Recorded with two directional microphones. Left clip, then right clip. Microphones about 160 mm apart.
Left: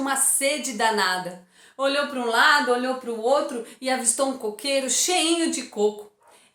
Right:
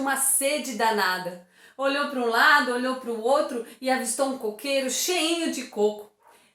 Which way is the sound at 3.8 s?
10° left (ahead or behind).